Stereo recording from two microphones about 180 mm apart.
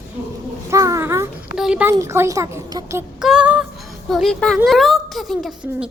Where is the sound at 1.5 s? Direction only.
5° right (ahead or behind).